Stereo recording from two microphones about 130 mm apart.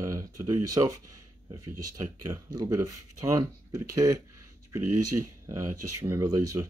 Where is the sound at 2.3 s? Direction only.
25° right (ahead or behind).